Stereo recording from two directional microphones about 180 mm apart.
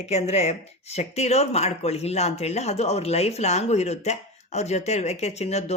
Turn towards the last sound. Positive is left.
turn(degrees=35)  # may be behind; listen again after turning